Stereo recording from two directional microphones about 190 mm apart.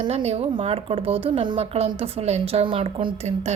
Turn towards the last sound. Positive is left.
turn(degrees=-30)  # may be behind; listen again after turning